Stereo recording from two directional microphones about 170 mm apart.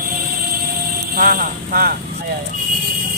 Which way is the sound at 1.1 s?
60° right (ahead or behind).